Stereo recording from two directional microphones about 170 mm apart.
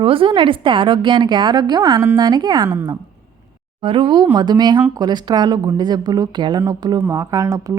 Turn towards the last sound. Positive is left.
turn(degrees=-20)  # may be behind; listen again after turning